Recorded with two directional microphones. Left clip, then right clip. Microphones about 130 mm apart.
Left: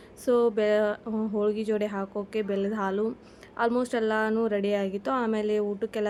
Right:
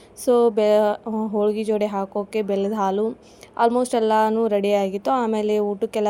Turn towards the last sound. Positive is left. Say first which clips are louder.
# right 6 dB
turn(degrees=-20)  # may be behind; listen again after turning